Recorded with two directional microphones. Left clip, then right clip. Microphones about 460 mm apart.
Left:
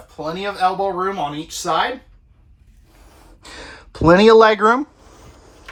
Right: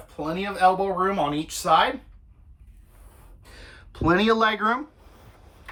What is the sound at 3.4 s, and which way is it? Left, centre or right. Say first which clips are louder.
Speech: left 11 dB; centre.